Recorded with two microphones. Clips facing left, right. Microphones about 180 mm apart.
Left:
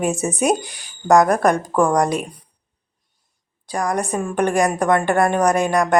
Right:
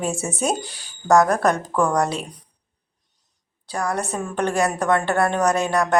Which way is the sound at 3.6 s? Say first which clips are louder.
Left 3 dB; 15° left (ahead or behind).